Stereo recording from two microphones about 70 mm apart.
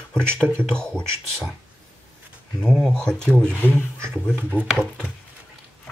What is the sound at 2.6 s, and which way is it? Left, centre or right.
Speech, centre.